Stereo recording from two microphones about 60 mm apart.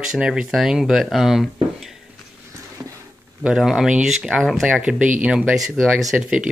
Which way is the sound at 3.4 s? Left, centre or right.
Centre.